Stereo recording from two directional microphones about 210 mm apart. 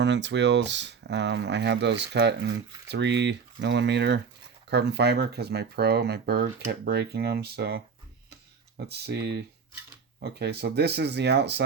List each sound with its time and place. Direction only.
0.0 s speech: 55° right (ahead or behind)
8.9 s speech: 50° right (ahead or behind)